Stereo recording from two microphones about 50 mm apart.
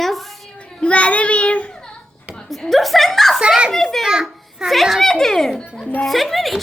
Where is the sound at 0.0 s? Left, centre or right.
Centre.